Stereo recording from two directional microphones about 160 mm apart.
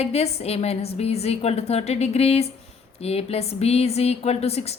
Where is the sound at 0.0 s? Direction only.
40° left (ahead or behind).